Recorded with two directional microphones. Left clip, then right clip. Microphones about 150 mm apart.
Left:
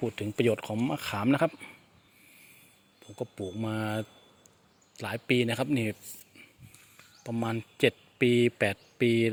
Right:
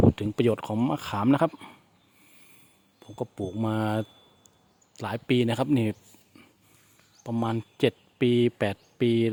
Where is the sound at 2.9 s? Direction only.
45° right (ahead or behind).